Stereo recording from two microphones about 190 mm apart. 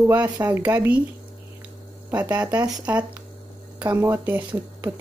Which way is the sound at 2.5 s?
20° right (ahead or behind).